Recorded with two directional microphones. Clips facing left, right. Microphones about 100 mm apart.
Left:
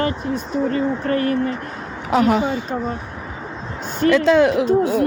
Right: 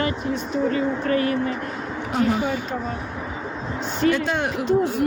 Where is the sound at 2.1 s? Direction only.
85° left.